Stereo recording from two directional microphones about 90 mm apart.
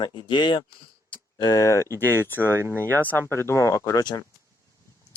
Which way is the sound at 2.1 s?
25° left (ahead or behind).